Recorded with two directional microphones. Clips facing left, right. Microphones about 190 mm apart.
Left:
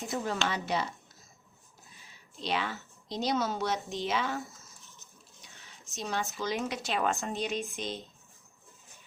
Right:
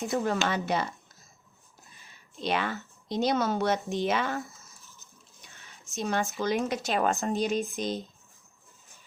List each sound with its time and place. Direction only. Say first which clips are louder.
0.3 s speech: right 4 dB; 50° right (ahead or behind)
2.4 s a woman's voice: right 4 dB; 55° right (ahead or behind)
5.9 s a woman's voice: right 5 dB; 55° right (ahead or behind)